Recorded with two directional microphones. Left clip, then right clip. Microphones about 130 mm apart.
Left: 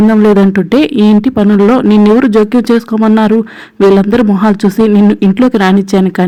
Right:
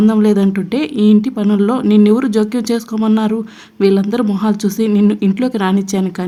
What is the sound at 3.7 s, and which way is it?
Speech, 45° left (ahead or behind).